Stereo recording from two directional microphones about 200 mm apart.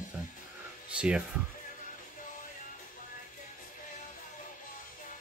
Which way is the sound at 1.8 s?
40° left (ahead or behind).